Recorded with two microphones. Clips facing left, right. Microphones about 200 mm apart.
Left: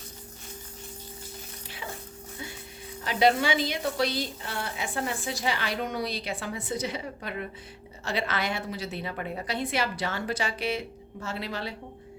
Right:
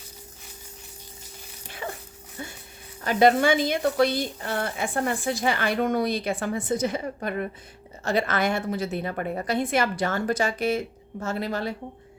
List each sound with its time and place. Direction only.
1.8 s dog: 55° right (ahead or behind)
3.0 s a woman's voice: 50° right (ahead or behind)